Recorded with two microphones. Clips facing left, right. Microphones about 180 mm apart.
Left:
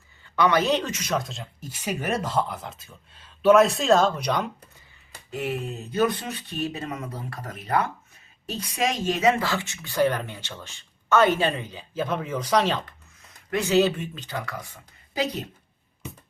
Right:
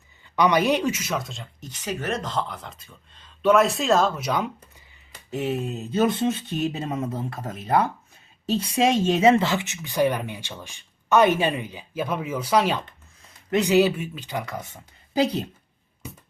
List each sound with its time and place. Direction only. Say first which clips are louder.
0.3 s speech: right 1 dB; 15° right (ahead or behind)
5.3 s speech: right 3 dB; 20° right (ahead or behind)